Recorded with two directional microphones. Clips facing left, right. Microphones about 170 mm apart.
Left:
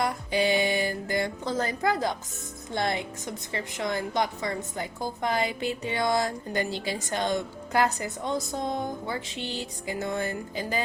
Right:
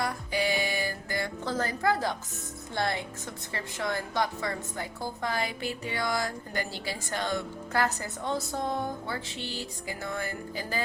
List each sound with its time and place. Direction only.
0.0 s music: 20° left (ahead or behind)
2.7 s a woman's voice: 20° left (ahead or behind)